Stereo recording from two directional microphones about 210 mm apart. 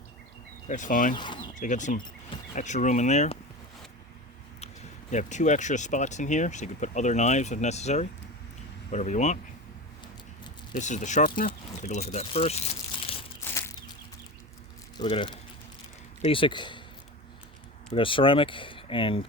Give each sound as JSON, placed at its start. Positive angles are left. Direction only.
{"t": 0.7, "sound": "speech", "side_deg": 40}
{"t": 1.1, "sound": "speech", "side_deg": 20}
{"t": 1.5, "sound": "speech", "side_deg": 35}
{"t": 4.6, "sound": "speech", "side_deg": 35}
{"t": 10.8, "sound": "speech", "side_deg": 35}
{"t": 13.4, "sound": "a sound", "side_deg": 10}
{"t": 14.9, "sound": "speech", "side_deg": 25}
{"t": 17.9, "sound": "speech", "side_deg": 25}